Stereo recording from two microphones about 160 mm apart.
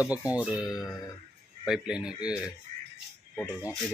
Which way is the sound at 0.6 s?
20° left (ahead or behind).